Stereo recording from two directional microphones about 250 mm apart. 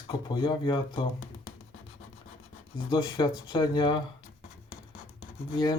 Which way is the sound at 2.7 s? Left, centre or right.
Centre.